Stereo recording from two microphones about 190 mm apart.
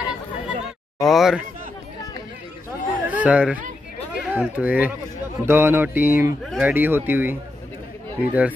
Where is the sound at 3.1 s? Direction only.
10° right (ahead or behind).